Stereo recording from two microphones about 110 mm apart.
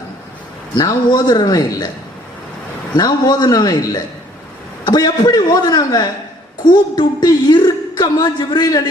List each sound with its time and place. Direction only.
0.8 s a woman's voice: 40° left (ahead or behind)
2.9 s a woman's voice: 40° left (ahead or behind)